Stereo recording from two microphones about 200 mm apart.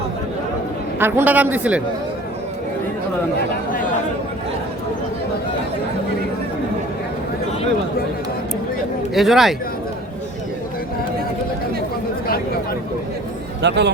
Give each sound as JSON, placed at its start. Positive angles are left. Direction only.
{"t": 0.9, "sound": "a man's voice", "side_deg": -10}
{"t": 9.1, "sound": "speech", "side_deg": 0}
{"t": 13.6, "sound": "a man's voice", "side_deg": -60}